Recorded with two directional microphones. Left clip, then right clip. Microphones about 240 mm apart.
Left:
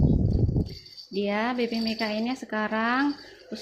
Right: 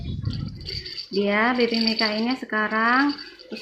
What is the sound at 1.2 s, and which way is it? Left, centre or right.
Speech, centre.